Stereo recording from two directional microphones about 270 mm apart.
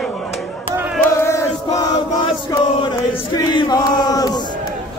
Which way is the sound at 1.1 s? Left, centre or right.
Centre.